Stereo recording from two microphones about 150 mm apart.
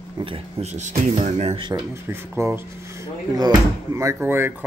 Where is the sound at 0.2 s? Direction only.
40° right (ahead or behind).